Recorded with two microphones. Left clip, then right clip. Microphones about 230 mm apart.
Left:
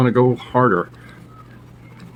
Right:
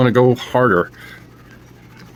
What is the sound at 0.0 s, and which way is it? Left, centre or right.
Speech, right.